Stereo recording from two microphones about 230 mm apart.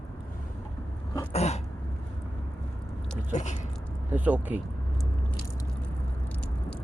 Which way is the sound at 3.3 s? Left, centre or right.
Left.